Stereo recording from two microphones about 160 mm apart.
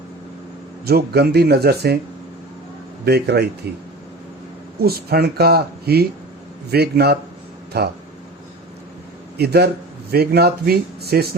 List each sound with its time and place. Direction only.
0.9 s speech: 85° right
3.0 s speech: 90° right
4.8 s speech: 70° right (ahead or behind)
6.7 s speech: 90° right
9.4 s speech: 90° right
10.1 s speech: 80° right